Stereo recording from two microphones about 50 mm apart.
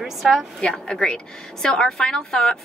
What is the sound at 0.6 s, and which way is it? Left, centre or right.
A woman's voice, centre.